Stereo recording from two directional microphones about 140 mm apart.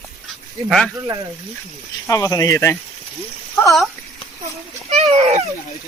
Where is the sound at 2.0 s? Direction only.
20° left (ahead or behind).